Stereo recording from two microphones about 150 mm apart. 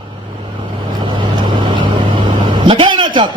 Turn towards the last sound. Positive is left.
turn(degrees=-30)  # may be behind; listen again after turning